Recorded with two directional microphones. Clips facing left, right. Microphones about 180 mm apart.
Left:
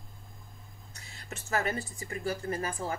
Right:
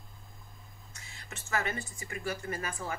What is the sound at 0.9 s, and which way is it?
Speech, 35° left (ahead or behind).